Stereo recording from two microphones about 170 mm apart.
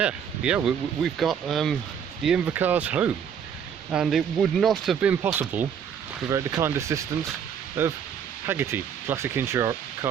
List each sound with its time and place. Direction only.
0.0 s speech: 5° right (ahead or behind)
5.2 s speech: 10° right (ahead or behind)